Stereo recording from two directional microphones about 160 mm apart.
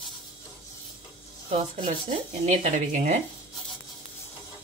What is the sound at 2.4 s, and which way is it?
Speech, 55° right (ahead or behind).